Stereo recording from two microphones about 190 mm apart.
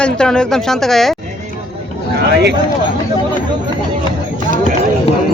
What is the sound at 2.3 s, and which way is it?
Speech, 65° right (ahead or behind).